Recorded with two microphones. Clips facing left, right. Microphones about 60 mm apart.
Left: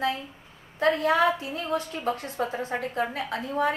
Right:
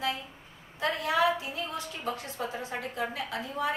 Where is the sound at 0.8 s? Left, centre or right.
Left.